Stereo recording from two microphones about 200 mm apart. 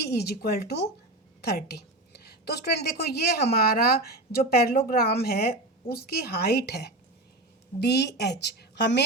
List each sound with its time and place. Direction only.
0.0 s a woman's voice: 55° left (ahead or behind)